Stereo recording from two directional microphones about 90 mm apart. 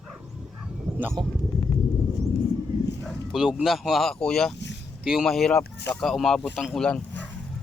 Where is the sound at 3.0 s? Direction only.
Centre (ahead or behind).